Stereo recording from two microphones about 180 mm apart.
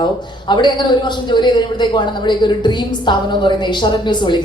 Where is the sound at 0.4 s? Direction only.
25° left (ahead or behind).